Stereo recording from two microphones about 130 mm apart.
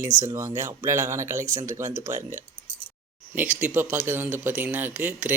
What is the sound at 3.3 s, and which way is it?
Speech, 10° right (ahead or behind).